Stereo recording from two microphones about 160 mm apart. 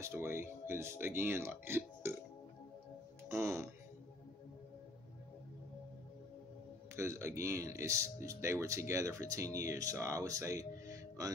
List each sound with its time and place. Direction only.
0.0 s speech: 15° right (ahead or behind)
3.3 s speech: 15° right (ahead or behind)
7.0 s speech: 15° right (ahead or behind)